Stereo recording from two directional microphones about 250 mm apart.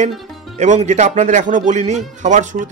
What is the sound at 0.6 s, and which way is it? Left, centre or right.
Speech, right.